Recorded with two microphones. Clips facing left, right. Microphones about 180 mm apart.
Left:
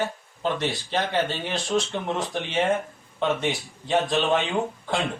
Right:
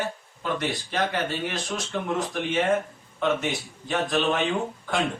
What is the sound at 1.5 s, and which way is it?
Speech, 30° left (ahead or behind).